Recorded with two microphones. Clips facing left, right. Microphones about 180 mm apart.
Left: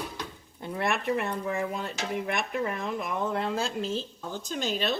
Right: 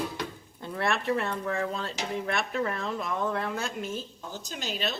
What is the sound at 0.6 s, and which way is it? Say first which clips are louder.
Speech: even; 20° left (ahead or behind).